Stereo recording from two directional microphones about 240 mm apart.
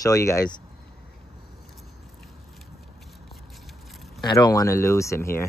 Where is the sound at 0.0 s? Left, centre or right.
Centre.